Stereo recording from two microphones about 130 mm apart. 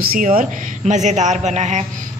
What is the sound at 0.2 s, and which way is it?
Speech, 90° right.